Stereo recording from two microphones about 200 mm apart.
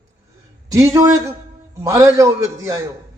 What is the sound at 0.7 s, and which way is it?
A man's voice, 15° right (ahead or behind).